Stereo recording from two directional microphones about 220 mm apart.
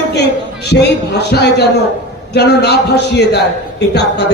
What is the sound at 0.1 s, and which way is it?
A man's voice, 50° left (ahead or behind).